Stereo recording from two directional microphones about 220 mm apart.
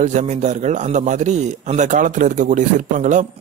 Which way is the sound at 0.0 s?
35° right (ahead or behind).